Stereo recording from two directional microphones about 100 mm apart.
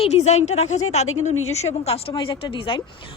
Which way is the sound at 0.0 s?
90° left.